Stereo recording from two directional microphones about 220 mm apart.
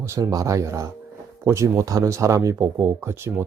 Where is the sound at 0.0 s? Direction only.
15° right (ahead or behind).